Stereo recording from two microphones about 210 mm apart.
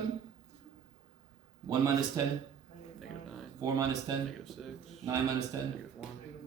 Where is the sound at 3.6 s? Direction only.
15° right (ahead or behind).